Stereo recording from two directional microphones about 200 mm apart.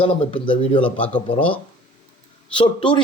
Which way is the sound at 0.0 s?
25° left (ahead or behind).